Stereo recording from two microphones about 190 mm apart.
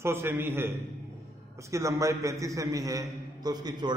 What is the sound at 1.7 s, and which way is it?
A man's voice, 15° right (ahead or behind).